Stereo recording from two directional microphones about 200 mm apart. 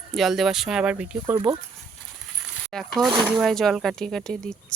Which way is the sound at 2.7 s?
Centre (ahead or behind).